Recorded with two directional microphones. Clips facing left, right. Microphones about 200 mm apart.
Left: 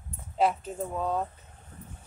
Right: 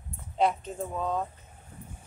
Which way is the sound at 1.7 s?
10° right (ahead or behind).